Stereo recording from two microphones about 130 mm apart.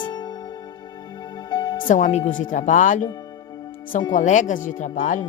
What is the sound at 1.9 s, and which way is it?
A woman's voice, 75° left (ahead or behind).